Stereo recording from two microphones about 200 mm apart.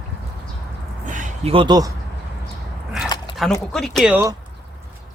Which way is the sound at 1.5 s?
25° right (ahead or behind).